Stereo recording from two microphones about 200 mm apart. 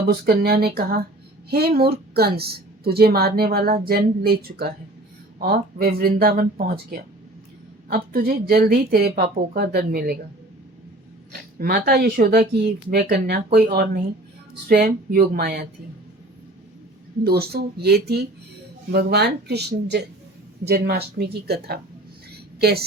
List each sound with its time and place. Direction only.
0.1 s speech: 50° right (ahead or behind)
11.3 s speech: 45° right (ahead or behind)
17.2 s speech: 50° right (ahead or behind)
22.3 s a sound: 50° right (ahead or behind)